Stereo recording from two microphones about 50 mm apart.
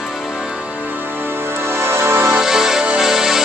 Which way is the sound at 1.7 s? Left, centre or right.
Right.